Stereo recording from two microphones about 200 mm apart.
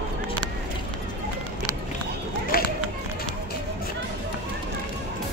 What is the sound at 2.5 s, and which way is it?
Run, 50° left (ahead or behind).